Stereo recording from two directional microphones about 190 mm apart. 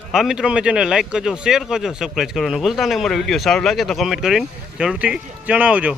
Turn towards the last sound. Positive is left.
turn(degrees=-5)  # may be behind; listen again after turning